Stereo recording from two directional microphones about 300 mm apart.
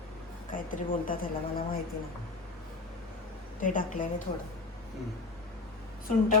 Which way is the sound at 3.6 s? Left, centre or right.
Left.